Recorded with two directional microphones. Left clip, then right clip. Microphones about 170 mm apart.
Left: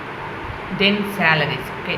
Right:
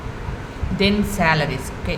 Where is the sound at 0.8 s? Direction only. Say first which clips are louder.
Left 1 dB; 50° right (ahead or behind).